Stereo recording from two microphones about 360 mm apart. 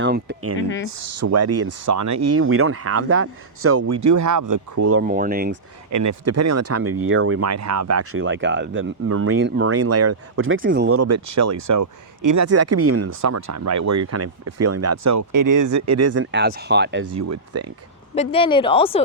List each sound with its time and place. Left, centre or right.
0.0 s speech: right
0.9 s speech: right
4.0 s speech: right
5.0 s speech: right
5.9 s speech: right
10.6 s speech: right
17.2 s speech: right
18.1 s speech: centre